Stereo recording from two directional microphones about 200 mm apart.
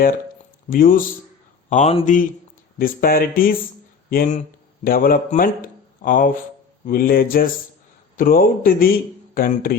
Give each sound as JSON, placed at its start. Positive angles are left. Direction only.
{"t": 0.7, "sound": "a man's voice", "side_deg": 45}
{"t": 1.7, "sound": "a man's voice", "side_deg": 30}
{"t": 2.7, "sound": "a man's voice", "side_deg": 45}